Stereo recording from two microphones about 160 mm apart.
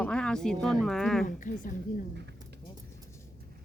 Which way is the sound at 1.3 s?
55° left (ahead or behind).